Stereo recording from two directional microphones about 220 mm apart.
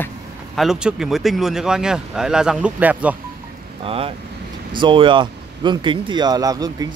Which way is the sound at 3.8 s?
25° right (ahead or behind).